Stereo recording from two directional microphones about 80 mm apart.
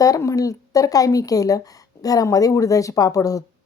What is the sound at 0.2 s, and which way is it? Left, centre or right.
Speech, left.